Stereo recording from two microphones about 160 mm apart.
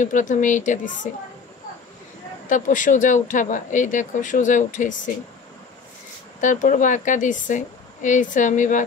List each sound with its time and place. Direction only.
0.0 s speech: 50° left (ahead or behind)
2.5 s speech: 55° left (ahead or behind)
6.4 s speech: 55° left (ahead or behind)